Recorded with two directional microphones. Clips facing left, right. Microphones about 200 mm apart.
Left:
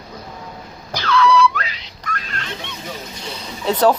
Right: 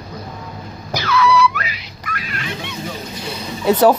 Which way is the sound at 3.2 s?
10° right (ahead or behind).